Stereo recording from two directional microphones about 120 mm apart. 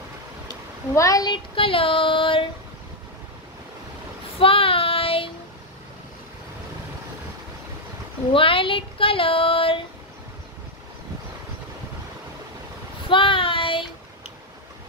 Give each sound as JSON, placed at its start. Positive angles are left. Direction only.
{"t": 0.9, "sound": "a woman's voice", "side_deg": 30}
{"t": 1.3, "sound": "child singing", "side_deg": 45}
{"t": 4.4, "sound": "child singing", "side_deg": 50}
{"t": 8.3, "sound": "speech", "side_deg": 50}
{"t": 13.1, "sound": "child singing", "side_deg": 45}